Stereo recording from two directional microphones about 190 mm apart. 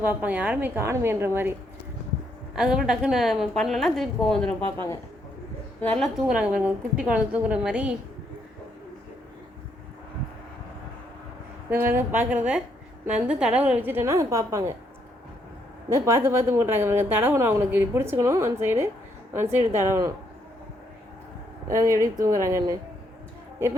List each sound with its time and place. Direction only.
0.0 s a woman's voice: 10° right (ahead or behind)
2.6 s a woman's voice: 5° right (ahead or behind)
5.8 s a woman's voice: 5° left (ahead or behind)
11.7 s a woman's voice: 10° right (ahead or behind)
15.9 s a woman's voice: 15° right (ahead or behind)
21.7 s a woman's voice: 15° right (ahead or behind)